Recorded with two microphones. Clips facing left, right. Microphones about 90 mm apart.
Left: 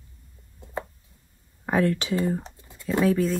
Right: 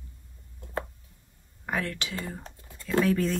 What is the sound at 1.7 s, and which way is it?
Speech, 25° left (ahead or behind).